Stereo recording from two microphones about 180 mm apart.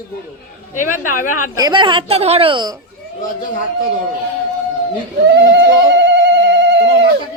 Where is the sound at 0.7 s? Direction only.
45° left (ahead or behind).